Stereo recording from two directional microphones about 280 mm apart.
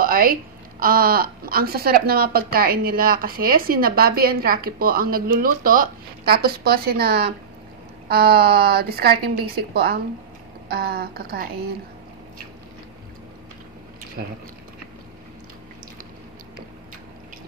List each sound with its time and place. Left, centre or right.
0.0 s a woman's voice: right